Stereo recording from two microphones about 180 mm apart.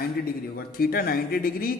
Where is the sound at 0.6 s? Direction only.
55° left (ahead or behind).